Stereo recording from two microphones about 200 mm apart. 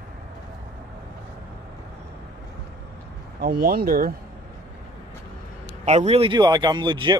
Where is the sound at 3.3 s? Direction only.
50° right (ahead or behind).